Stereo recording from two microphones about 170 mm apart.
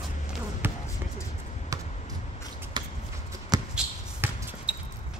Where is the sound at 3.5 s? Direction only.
25° right (ahead or behind).